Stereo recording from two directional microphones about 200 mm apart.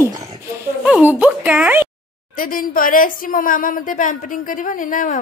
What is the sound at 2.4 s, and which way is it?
A woman's voice, 45° left (ahead or behind).